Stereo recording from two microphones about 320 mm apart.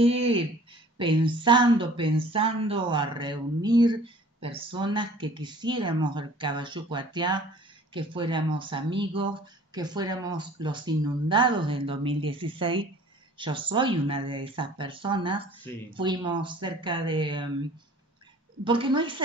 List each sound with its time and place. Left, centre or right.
0.0 s speech: centre
18.6 s speech: centre